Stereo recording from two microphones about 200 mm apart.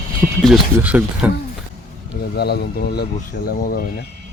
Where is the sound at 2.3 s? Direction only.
55° left (ahead or behind).